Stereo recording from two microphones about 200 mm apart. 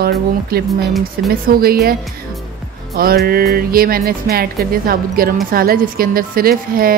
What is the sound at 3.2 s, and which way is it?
A woman's voice, 50° right (ahead or behind).